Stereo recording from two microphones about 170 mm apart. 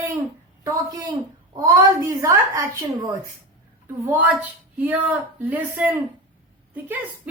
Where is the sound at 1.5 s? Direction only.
15° right (ahead or behind).